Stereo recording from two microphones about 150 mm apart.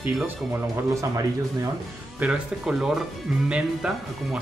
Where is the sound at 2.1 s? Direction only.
5° right (ahead or behind).